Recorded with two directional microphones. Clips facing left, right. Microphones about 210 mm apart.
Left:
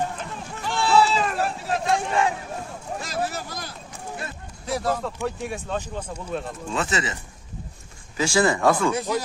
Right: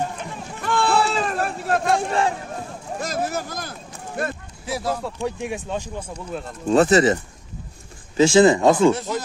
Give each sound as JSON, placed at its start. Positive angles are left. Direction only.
{"t": 0.6, "sound": "a sound", "side_deg": -55}
{"t": 2.0, "sound": "a sound", "side_deg": -35}
{"t": 3.0, "sound": "speech", "side_deg": -45}
{"t": 4.6, "sound": "speech", "side_deg": -5}
{"t": 6.7, "sound": "speech", "side_deg": -40}
{"t": 8.2, "sound": "speech", "side_deg": -20}
{"t": 8.9, "sound": "speech", "side_deg": 10}